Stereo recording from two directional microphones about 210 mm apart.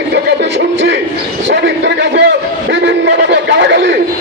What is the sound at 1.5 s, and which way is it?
A man's voice, 55° right (ahead or behind).